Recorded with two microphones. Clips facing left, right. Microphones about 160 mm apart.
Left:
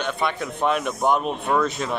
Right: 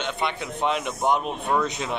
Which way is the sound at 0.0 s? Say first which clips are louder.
Left 3 dB; 20° right (ahead or behind).